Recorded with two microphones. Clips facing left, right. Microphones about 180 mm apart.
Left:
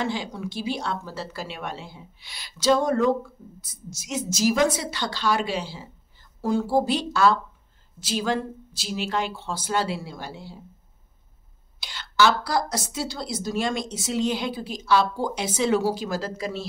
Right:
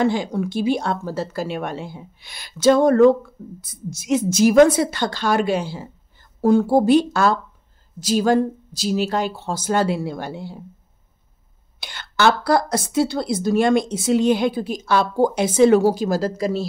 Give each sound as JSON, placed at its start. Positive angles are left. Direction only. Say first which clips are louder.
{"t": 0.0, "sound": "speech", "louder": "right 8 dB", "side_deg": -50}
{"t": 11.8, "sound": "speech", "louder": "right 3 dB", "side_deg": -55}